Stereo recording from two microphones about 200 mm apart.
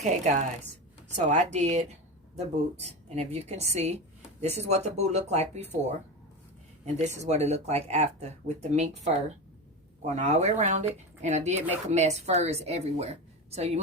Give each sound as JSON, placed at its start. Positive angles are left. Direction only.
{"t": 0.0, "sound": "a woman's voice", "side_deg": -35}
{"t": 6.8, "sound": "a woman's voice", "side_deg": -35}